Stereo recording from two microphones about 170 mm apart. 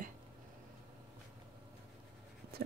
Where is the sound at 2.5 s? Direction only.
65° right (ahead or behind).